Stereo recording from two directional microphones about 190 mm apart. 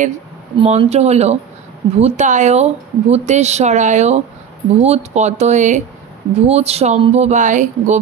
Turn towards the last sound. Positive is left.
turn(degrees=-40)  # may be behind; listen again after turning